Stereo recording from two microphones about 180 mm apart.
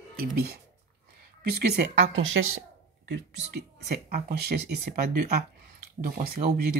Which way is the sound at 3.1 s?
65° right (ahead or behind).